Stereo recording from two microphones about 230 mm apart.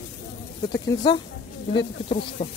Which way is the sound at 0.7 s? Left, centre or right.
Centre.